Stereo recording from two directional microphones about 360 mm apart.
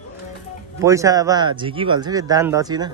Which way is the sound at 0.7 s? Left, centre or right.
Centre.